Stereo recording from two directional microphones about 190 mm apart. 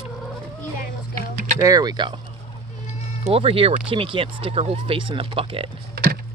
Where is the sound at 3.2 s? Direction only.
30° right (ahead or behind).